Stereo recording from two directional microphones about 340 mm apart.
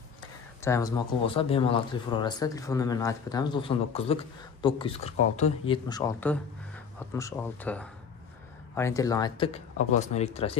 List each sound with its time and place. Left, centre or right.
0.6 s speech: centre